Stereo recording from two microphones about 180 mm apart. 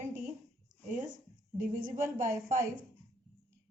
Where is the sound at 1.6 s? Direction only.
45° right (ahead or behind).